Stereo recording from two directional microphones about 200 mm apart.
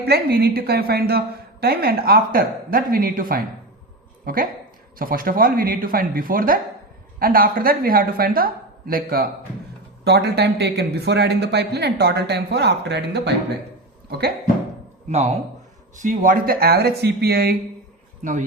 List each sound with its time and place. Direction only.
0.0 s a woman's voice: 50° right (ahead or behind)
4.9 s a woman's voice: 45° right (ahead or behind)
16.0 s a woman's voice: 45° right (ahead or behind)
18.2 s speech: 40° right (ahead or behind)